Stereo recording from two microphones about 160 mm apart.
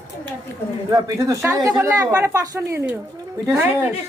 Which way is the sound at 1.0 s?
20° right (ahead or behind).